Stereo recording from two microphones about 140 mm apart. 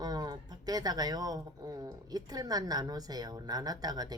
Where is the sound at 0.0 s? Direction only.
30° right (ahead or behind).